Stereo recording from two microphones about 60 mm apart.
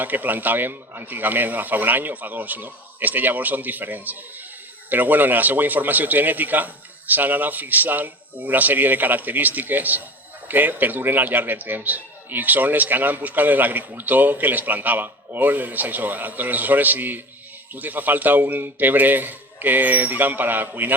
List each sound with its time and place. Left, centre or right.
0.0 s a man's voice: right